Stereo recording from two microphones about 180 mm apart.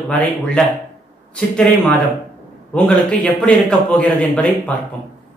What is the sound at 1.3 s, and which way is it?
A man's voice, 5° left (ahead or behind).